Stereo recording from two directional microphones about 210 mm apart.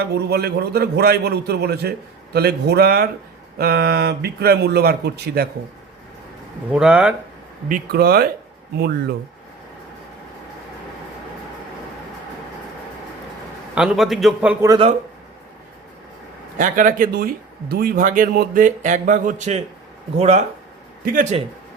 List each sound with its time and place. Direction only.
0.0 s a man's voice: 50° right (ahead or behind)
6.7 s a man's voice: 5° right (ahead or behind)
7.7 s a man's voice: 45° right (ahead or behind)
13.7 s a man's voice: centre (ahead or behind)
16.6 s speech: 40° right (ahead or behind)
21.0 s speech: 40° right (ahead or behind)